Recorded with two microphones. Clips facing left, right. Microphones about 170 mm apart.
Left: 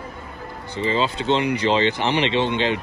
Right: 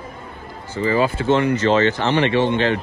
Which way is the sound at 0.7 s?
20° left (ahead or behind).